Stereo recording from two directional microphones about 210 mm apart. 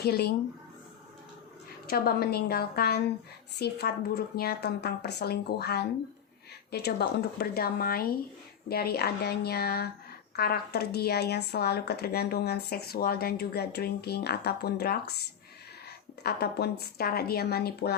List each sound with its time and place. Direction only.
0.0 s speech: 50° left (ahead or behind)
1.9 s speech: 45° left (ahead or behind)
16.2 s speech: 50° left (ahead or behind)